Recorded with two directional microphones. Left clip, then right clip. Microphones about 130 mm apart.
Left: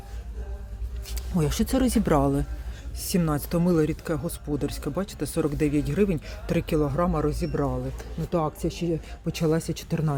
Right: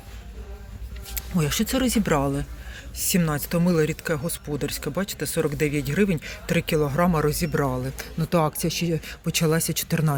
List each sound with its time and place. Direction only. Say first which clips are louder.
1.1 s speech: right 2 dB; 25° left (ahead or behind)
6.9 s speech: right 3 dB; centre (ahead or behind)